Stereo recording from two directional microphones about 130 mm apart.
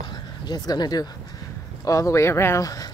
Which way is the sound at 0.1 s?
30° left (ahead or behind).